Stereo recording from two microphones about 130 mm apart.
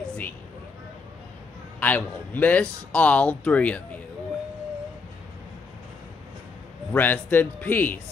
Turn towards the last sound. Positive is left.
turn(degrees=15)  # may be behind; listen again after turning